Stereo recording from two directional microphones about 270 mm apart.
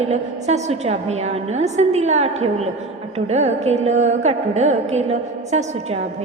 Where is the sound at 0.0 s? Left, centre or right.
Right.